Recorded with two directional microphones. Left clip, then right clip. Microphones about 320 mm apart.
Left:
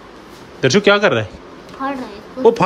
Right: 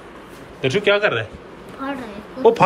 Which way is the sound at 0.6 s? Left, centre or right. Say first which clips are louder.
Left 5 dB; centre.